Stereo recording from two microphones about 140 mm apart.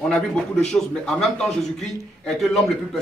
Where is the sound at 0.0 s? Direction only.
5° left (ahead or behind).